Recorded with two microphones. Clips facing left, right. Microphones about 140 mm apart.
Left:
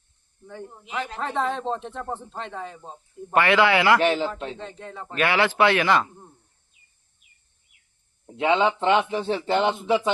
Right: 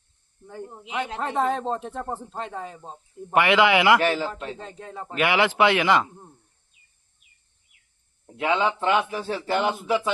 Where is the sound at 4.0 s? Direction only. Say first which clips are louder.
Left 2 dB; 20° left (ahead or behind).